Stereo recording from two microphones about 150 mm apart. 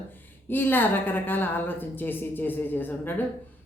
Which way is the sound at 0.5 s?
15° left (ahead or behind).